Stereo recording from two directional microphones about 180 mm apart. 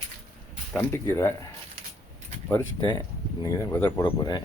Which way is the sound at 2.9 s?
25° left (ahead or behind).